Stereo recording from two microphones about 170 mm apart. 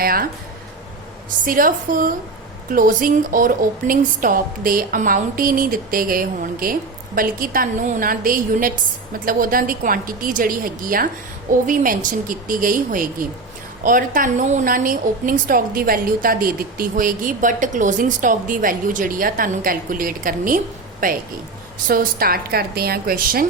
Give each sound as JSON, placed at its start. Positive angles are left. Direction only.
{"t": 0.0, "sound": "speech", "side_deg": -60}
{"t": 1.5, "sound": "a woman's voice", "side_deg": -55}